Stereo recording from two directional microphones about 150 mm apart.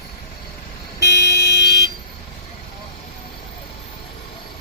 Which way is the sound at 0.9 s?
90° left.